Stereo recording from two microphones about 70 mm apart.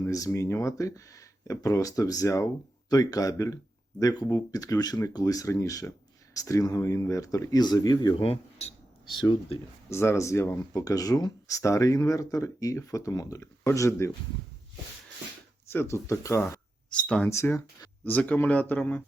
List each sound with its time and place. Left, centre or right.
0.1 s speech: left
2.9 s speech: left
4.0 s speech: left
9.9 s speech: left
10.7 s speech: left
15.7 s speech: left
16.9 s speech: centre
17.2 s speech: left
18.0 s speech: left